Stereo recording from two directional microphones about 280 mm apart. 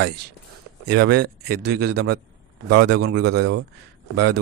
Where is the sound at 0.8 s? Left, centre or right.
Right.